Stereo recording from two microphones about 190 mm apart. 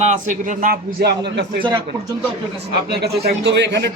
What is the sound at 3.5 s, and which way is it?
Speech, 65° right (ahead or behind).